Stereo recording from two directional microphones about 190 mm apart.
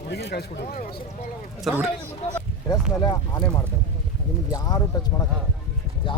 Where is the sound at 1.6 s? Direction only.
5° right (ahead or behind).